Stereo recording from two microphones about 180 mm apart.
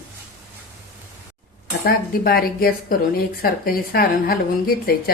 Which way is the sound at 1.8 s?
55° left (ahead or behind).